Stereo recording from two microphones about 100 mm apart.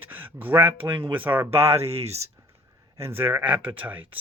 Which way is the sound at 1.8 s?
90° right.